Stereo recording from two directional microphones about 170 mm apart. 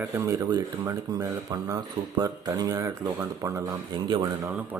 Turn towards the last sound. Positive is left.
turn(degrees=-10)  # may be behind; listen again after turning